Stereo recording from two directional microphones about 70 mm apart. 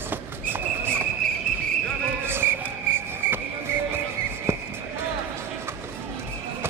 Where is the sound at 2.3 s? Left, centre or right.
Right.